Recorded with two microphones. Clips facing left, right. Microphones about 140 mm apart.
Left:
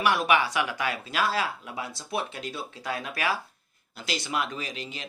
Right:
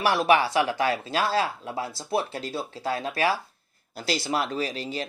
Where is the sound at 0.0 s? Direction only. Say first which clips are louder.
Right 3 dB; 30° right (ahead or behind).